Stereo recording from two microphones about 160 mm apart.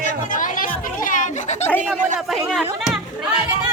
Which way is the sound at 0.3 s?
55° left (ahead or behind).